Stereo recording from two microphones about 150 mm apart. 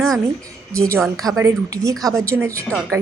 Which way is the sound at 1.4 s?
20° right (ahead or behind).